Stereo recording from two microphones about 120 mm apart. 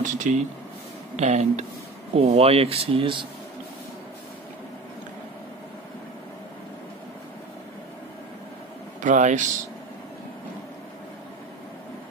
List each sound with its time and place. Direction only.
0.0 s speech: 90° right
1.1 s speech: 70° right (ahead or behind)
2.1 s speech: 55° right (ahead or behind)
9.0 s speech: 90° right